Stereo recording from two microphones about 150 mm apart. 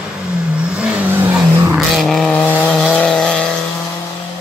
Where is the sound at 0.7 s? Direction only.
10° right (ahead or behind).